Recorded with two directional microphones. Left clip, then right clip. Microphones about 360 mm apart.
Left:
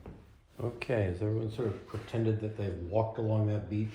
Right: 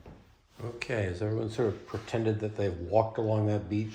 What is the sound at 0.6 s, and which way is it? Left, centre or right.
Speech, centre.